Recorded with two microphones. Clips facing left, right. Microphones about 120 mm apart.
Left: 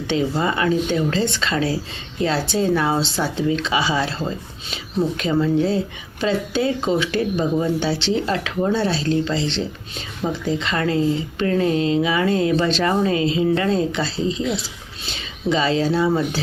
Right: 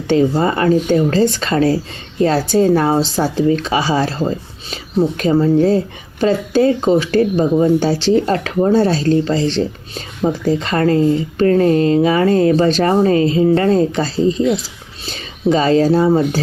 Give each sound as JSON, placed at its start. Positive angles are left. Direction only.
{"t": 0.1, "sound": "speech", "side_deg": -40}